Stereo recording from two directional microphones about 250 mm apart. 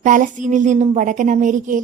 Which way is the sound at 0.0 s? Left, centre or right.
Right.